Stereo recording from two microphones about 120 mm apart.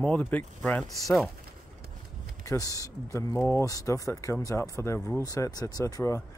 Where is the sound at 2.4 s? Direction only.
30° left (ahead or behind).